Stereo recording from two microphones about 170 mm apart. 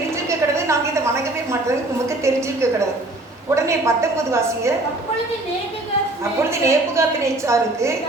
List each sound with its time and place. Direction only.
0.3 s a sound: 15° right (ahead or behind)
1.6 s a woman's voice: 15° right (ahead or behind)
6.5 s a woman's voice: 15° right (ahead or behind)